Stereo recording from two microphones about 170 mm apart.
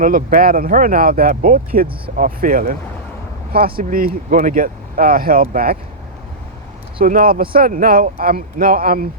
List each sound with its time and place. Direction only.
0.0 s speech: 55° right (ahead or behind)
3.8 s speech: 55° right (ahead or behind)
7.0 s speech: 55° right (ahead or behind)